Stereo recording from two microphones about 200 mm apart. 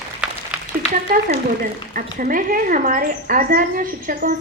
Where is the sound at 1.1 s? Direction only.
45° right (ahead or behind).